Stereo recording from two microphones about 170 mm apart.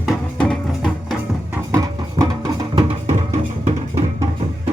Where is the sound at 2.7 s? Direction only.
35° right (ahead or behind).